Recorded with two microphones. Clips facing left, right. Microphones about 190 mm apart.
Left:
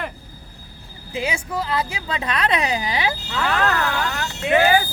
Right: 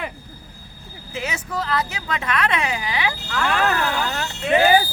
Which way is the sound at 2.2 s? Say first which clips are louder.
Left 1 dB; 35° left (ahead or behind).